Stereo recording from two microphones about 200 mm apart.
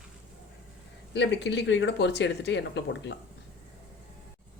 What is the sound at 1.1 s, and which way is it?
Speech, 60° left (ahead or behind).